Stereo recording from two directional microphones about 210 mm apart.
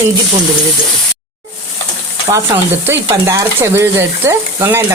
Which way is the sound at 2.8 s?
10° right (ahead or behind).